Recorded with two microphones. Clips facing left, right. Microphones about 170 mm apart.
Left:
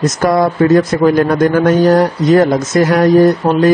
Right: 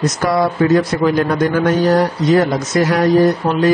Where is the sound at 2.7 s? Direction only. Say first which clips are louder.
Left 3 dB; 45° left (ahead or behind).